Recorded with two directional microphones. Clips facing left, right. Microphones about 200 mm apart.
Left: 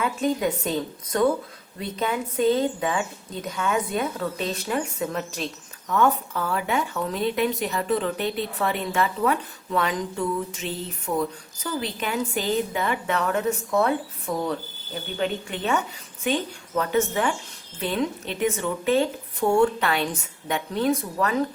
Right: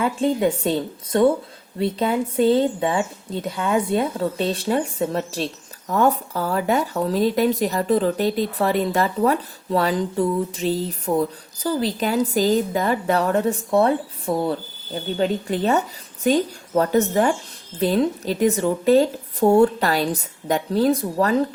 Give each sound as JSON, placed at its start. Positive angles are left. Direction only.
{"t": 0.0, "sound": "speech", "side_deg": -30}